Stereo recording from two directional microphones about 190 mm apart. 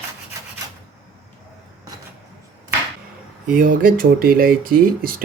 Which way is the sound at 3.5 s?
45° right (ahead or behind).